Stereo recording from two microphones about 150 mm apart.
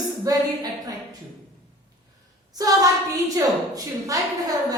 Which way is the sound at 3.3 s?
25° right (ahead or behind).